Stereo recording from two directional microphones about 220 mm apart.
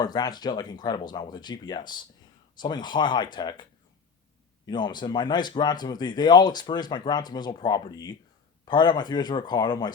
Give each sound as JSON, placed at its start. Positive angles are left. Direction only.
{"t": 0.0, "sound": "speech", "side_deg": 20}